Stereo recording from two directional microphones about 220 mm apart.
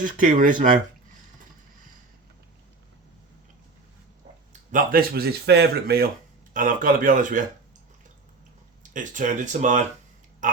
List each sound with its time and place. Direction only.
0.0 s speech: 40° right (ahead or behind)
4.7 s speech: 40° right (ahead or behind)
8.8 s speech: 35° right (ahead or behind)
10.4 s a sound: 35° right (ahead or behind)